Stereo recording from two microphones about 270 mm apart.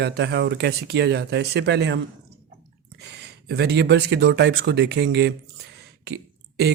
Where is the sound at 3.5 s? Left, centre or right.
Right.